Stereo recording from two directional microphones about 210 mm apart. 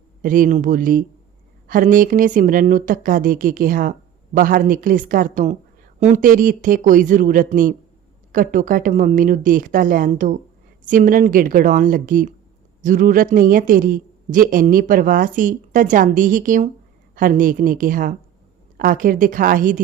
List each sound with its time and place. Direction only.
0.2 s speech: 40° right (ahead or behind)